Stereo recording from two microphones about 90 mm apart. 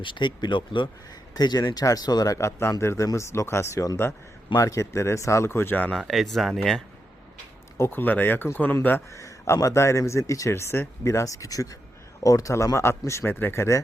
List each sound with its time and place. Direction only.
0.0 s speech: 65° left (ahead or behind)
1.3 s speech: 50° left (ahead or behind); by 5.9 s 20° left (ahead or behind)
6.0 s speech: centre (ahead or behind)
7.8 s speech: 25° left (ahead or behind)
9.1 s speech: 35° left (ahead or behind)